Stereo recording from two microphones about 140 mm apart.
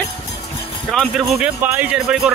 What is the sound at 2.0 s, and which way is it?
Speech, centre (ahead or behind).